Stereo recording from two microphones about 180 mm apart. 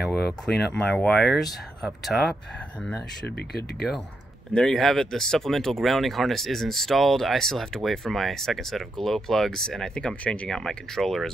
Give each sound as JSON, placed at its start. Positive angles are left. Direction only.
{"t": 0.0, "sound": "speech", "side_deg": 0}
{"t": 3.3, "sound": "speech", "side_deg": 60}
{"t": 4.6, "sound": "speech", "side_deg": 5}